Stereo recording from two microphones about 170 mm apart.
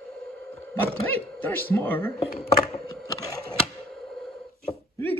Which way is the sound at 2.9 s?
20° left (ahead or behind).